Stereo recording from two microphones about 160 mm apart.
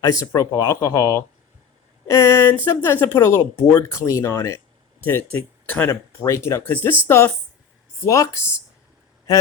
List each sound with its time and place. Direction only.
0.0 s speech: 20° left (ahead or behind)